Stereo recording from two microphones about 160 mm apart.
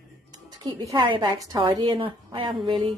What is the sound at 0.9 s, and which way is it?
A woman's voice, 30° right (ahead or behind).